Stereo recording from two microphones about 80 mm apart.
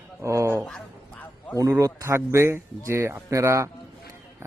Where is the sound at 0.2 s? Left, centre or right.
Right.